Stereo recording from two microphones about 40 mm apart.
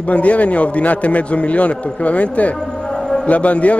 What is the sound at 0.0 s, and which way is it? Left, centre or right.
A man's voice, left.